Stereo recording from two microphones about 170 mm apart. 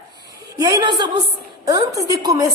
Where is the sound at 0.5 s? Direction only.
20° right (ahead or behind).